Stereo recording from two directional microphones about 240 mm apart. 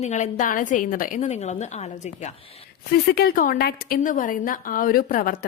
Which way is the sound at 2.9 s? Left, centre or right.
Left.